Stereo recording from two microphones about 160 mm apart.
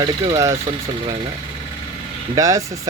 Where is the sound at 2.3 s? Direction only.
20° right (ahead or behind).